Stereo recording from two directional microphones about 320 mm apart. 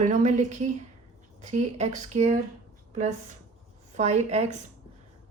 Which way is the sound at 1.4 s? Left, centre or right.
Right.